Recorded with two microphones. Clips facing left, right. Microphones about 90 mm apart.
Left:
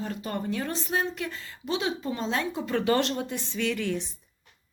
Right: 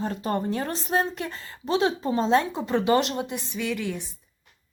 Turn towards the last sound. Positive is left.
turn(degrees=-5)  # may be behind; listen again after turning